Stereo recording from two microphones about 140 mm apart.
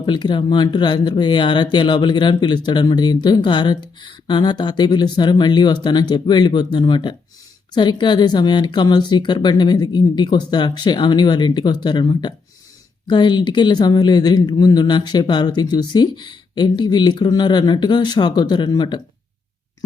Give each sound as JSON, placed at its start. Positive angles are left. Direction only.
{"t": 0.0, "sound": "speech", "side_deg": 35}